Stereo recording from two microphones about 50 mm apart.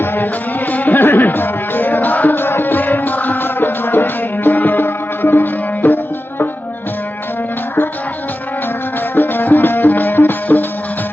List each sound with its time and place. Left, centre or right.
0.7 s music: left
9.1 s music: left